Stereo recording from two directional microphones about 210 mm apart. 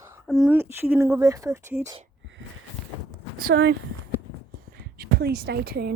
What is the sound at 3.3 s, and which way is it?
Speech, 50° right (ahead or behind).